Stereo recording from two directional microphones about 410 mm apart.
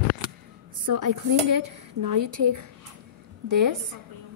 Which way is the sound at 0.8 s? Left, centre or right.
Right.